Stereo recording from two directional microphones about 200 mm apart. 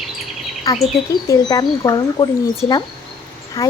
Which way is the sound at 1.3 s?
20° left (ahead or behind).